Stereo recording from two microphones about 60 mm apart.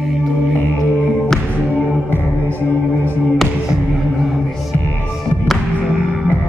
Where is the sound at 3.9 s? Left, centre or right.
Centre.